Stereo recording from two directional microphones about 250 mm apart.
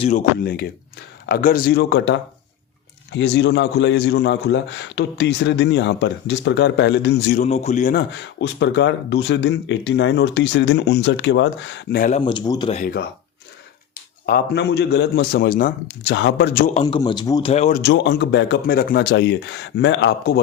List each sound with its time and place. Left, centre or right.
0.0 s a man's voice: left
7.4 s speech: left
12.2 s speech: centre
14.3 s a man's voice: left
16.8 s a man's voice: centre
17.5 s speech: left
17.8 s speech: left